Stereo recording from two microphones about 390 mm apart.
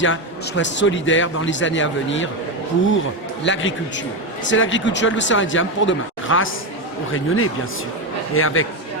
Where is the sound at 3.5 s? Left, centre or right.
Left.